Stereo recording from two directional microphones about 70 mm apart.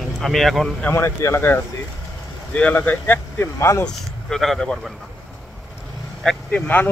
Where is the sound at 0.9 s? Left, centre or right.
Left.